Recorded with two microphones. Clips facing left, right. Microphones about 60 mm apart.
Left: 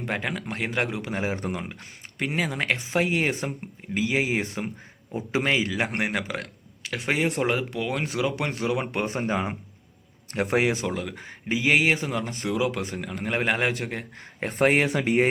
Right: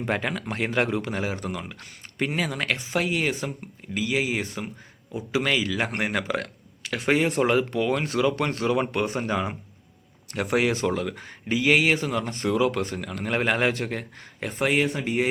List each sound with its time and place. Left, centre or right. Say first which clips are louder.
0.0 s a man's voice: right 2 dB; centre
1.1 s speech: left 1 dB; left
2.3 s speech: left 2 dB; centre
2.7 s speech: left 2 dB; left
5.8 s speech: even; centre
8.9 s speech: right 1 dB; left
10.8 s a man's voice: right 4 dB; centre
11.1 s speech: right 1 dB; centre
12.2 s speech: right 3 dB; centre
14.6 s speech: left 2 dB; left
14.8 s speech: left 3 dB; left